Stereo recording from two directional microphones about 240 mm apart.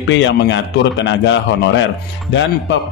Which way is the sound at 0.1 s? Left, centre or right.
Left.